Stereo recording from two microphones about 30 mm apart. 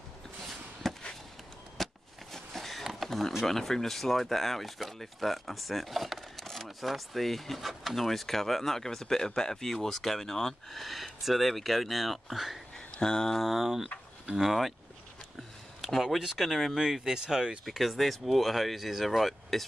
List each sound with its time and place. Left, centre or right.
0.8 s chop: centre
1.8 s a sound: centre
2.8 s a sound: centre
3.1 s speech: centre
6.3 s a sound: centre
6.8 s speech: centre
10.8 s speech: centre
12.9 s a sound: left
13.4 s speech: centre
16.3 s speech: centre
17.0 s speech: centre
17.6 s speech: centre